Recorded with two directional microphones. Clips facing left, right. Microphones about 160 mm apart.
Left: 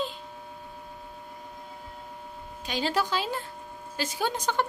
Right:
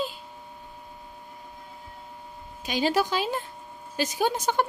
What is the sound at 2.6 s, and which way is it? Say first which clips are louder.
Speech: right 4 dB; 10° right (ahead or behind).